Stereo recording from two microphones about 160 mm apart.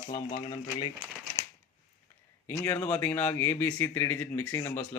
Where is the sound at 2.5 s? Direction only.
15° left (ahead or behind).